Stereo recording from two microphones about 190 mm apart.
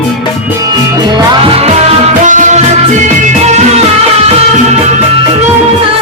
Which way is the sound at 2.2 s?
40° right (ahead or behind).